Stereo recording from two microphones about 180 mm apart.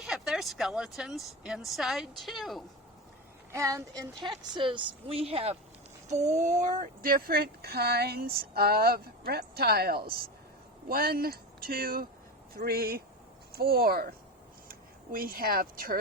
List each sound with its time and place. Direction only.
0.0 s speech: centre (ahead or behind)
3.5 s a woman's voice: 15° right (ahead or behind); by 16.0 s 55° right (ahead or behind)